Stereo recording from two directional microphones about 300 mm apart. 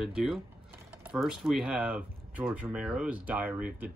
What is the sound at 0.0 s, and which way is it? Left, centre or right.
Speech, centre.